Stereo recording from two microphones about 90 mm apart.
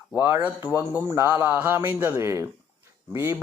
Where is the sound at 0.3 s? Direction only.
20° right (ahead or behind).